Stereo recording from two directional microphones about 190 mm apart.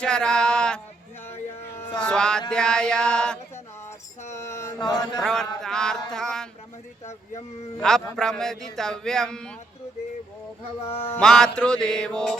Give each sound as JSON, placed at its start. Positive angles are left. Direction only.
{"t": 0.0, "sound": "a sound", "side_deg": 5}
{"t": 2.0, "sound": "a man's voice", "side_deg": 5}
{"t": 4.4, "sound": "mantra", "side_deg": 15}
{"t": 5.2, "sound": "a man's voice", "side_deg": 5}
{"t": 7.8, "sound": "a man's voice", "side_deg": 5}
{"t": 10.8, "sound": "a sound", "side_deg": 30}
{"t": 11.1, "sound": "a man's voice", "side_deg": 5}